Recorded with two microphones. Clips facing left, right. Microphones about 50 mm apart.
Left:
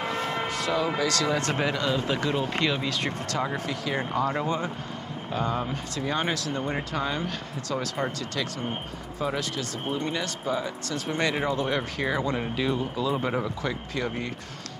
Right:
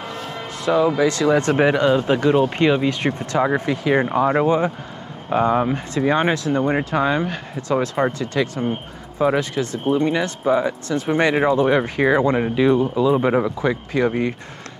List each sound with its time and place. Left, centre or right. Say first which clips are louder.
0.0 s a sound: left 1 dB; centre
0.7 s speech: right 11 dB; centre
12.6 s speech: right 12 dB; centre